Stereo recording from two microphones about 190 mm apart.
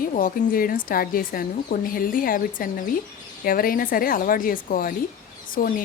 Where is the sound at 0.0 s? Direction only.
45° left (ahead or behind).